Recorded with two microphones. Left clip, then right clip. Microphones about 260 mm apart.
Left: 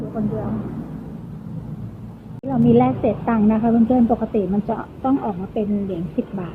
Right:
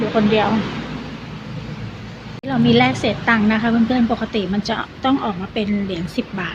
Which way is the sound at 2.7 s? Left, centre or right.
Centre.